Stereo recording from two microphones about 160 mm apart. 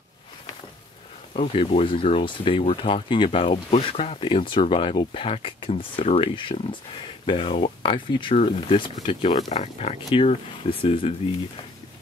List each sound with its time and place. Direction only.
1.3 s speech: 35° left (ahead or behind)